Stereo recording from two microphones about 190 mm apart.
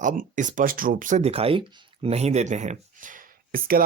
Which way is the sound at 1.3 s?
30° right (ahead or behind).